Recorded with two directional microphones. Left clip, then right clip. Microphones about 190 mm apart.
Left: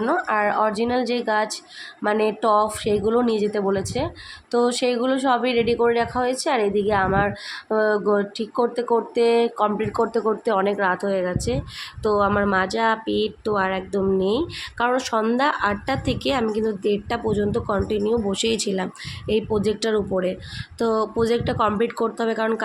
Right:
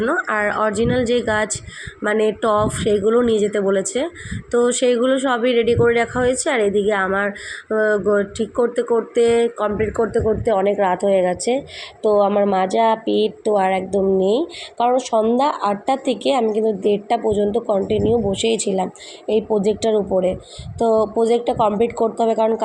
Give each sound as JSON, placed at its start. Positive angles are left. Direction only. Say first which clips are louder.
{"t": 0.0, "sound": "speech", "louder": "right 2 dB", "side_deg": -5}
{"t": 11.2, "sound": "speech", "louder": "right 6 dB", "side_deg": 35}
{"t": 12.3, "sound": "speech", "louder": "right 4 dB", "side_deg": 5}
{"t": 14.3, "sound": "speech", "louder": "right 4 dB", "side_deg": 35}
{"t": 15.2, "sound": "speech", "louder": "right 3 dB", "side_deg": 15}
{"t": 17.9, "sound": "speech", "louder": "right 4 dB", "side_deg": 45}
{"t": 18.3, "sound": "speech", "louder": "right 4 dB", "side_deg": 5}